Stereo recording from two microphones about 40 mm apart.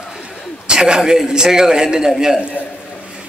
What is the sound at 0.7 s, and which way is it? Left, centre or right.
Speech, centre.